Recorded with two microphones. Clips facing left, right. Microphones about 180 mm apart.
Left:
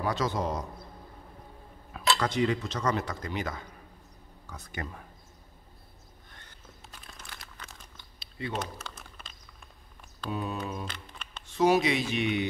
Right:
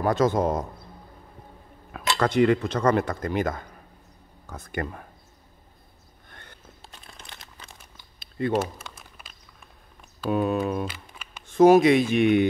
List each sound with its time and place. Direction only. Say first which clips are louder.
0.0 s speech: right 8 dB; 50° right (ahead or behind)
2.1 s speech: right 11 dB; 60° right (ahead or behind)
6.8 s crumpling: right 1 dB; 25° right (ahead or behind)
8.2 s a sound: right 11 dB; 50° right (ahead or behind)
8.5 s crumpling: right 9 dB; 10° right (ahead or behind)
10.3 s speech: right 10 dB; 60° right (ahead or behind)
10.9 s camera: right 2 dB; 10° right (ahead or behind)
11.5 s speech: right 9 dB; 50° right (ahead or behind)